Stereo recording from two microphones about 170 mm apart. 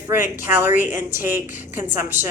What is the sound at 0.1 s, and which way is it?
Speech, 10° right (ahead or behind).